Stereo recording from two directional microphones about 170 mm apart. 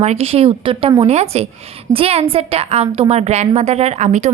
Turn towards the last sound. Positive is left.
turn(degrees=-40)  # may be behind; listen again after turning